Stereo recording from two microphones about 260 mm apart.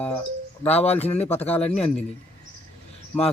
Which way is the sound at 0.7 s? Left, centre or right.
Left.